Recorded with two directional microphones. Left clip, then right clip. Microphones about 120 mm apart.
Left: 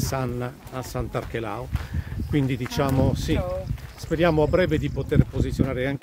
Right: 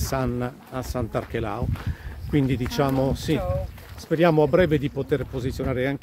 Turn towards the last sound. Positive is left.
turn(degrees=-30)  # may be behind; listen again after turning